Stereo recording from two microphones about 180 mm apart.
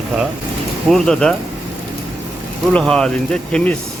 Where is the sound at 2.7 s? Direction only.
5° left (ahead or behind).